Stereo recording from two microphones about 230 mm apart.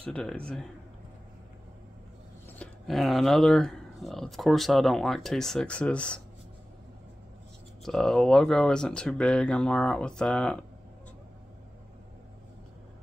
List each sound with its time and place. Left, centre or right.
0.0 s speech: centre
2.6 s speech: centre
7.8 s speech: centre